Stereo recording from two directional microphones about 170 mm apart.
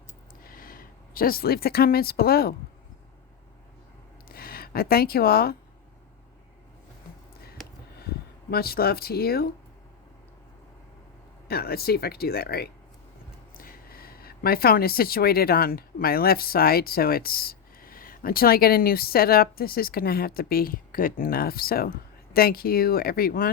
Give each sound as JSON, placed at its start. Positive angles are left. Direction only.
{"t": 0.4, "sound": "speech", "side_deg": 60}
{"t": 4.3, "sound": "speech", "side_deg": 60}
{"t": 8.4, "sound": "speech", "side_deg": 65}
{"t": 11.4, "sound": "speech", "side_deg": 65}